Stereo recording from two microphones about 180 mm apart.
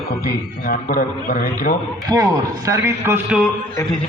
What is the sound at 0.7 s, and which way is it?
Speech, 50° left (ahead or behind).